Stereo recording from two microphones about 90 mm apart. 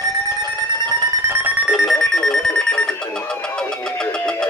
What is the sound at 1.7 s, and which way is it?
Alarm clock, centre (ahead or behind).